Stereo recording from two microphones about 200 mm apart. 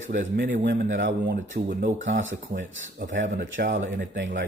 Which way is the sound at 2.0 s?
65° right (ahead or behind).